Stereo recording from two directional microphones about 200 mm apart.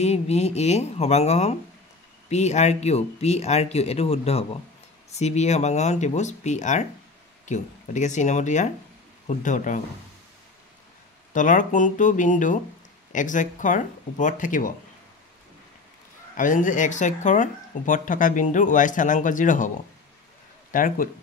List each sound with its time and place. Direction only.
0.0 s speech: 30° left (ahead or behind)
11.3 s speech: 40° left (ahead or behind)
16.3 s speech: 40° left (ahead or behind)
20.7 s speech: 45° left (ahead or behind)